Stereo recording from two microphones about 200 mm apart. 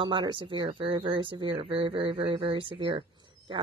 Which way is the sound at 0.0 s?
25° right (ahead or behind).